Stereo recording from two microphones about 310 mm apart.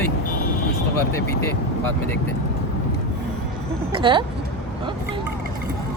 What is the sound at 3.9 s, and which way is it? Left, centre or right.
Speech, centre.